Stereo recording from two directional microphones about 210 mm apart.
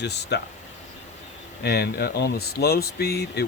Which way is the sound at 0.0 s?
55° left (ahead or behind).